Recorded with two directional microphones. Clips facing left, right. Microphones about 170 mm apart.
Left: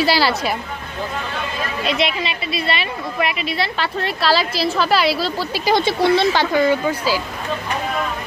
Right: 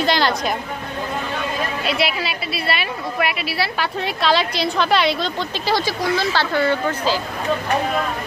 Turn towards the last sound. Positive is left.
turn(degrees=10)  # may be behind; listen again after turning